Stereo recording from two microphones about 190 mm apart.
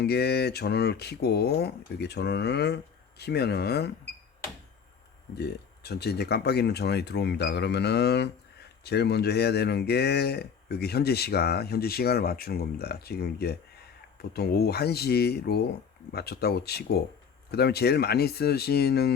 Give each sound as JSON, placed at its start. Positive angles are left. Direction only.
{"t": 0.0, "sound": "speech", "side_deg": 60}
{"t": 5.3, "sound": "speech", "side_deg": 60}